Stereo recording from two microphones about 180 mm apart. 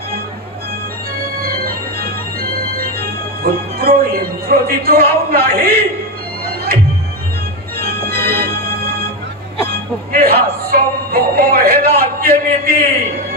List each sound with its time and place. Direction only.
1.4 s organ: 55° right (ahead or behind)
6.4 s music: 55° right (ahead or behind)
7.8 s organ: 55° right (ahead or behind)
10.1 s music: 55° right (ahead or behind)
10.6 s a man's voice: 55° right (ahead or behind)